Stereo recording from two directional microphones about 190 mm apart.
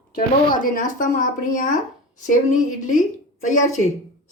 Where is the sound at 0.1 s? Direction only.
50° left (ahead or behind).